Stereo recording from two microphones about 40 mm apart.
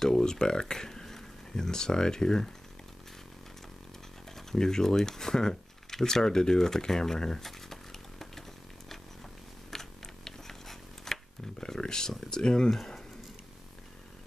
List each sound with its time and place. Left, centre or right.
0.0 s speech: centre
4.4 s a sound: centre
11.6 s speech: centre
12.6 s speech: centre